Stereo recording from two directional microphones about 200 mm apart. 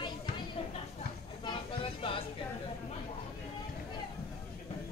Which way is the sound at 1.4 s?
25° left (ahead or behind).